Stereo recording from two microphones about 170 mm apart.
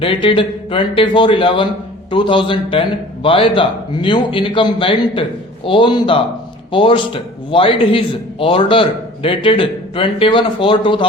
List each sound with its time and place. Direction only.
0.0 s a man's voice: 30° left (ahead or behind)